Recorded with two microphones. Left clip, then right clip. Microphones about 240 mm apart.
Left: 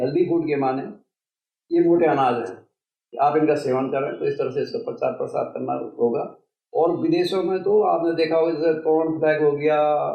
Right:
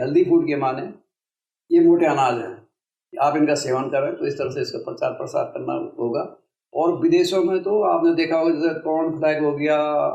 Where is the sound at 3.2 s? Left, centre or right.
Right.